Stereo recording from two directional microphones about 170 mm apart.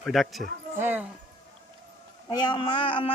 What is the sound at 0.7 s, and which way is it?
Speech, 10° right (ahead or behind).